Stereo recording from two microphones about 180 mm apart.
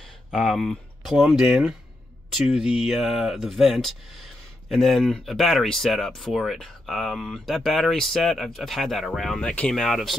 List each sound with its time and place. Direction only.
0.3 s speech: centre (ahead or behind)